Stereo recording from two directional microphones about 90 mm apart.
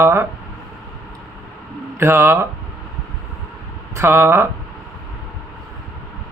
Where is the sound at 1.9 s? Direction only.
30° right (ahead or behind).